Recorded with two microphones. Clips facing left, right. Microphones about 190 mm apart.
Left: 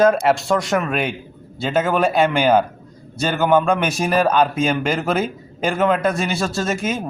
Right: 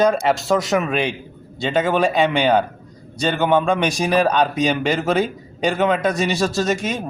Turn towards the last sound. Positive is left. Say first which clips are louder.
# right 1 dB
turn(degrees=5)  # may be behind; listen again after turning